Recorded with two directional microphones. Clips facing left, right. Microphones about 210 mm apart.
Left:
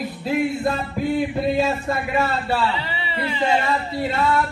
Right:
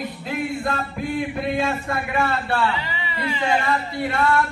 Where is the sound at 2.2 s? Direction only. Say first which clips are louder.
Even; centre (ahead or behind).